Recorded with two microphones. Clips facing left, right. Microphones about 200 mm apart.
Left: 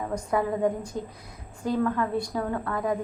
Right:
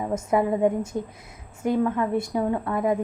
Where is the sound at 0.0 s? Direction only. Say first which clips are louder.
Right 4 dB; 25° right (ahead or behind).